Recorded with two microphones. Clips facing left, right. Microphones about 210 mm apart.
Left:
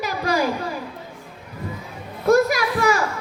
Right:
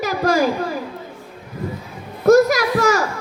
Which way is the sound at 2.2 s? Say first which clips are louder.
Right 5 dB; 40° right (ahead or behind).